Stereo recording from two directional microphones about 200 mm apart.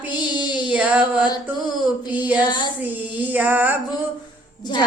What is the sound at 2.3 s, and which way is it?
Child singing, 20° left (ahead or behind).